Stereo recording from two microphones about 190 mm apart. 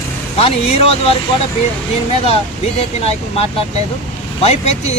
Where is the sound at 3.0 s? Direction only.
30° left (ahead or behind).